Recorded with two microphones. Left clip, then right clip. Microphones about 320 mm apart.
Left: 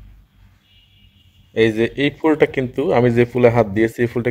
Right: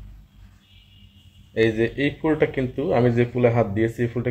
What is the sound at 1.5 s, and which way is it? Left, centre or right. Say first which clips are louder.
Speech: left 4 dB; left.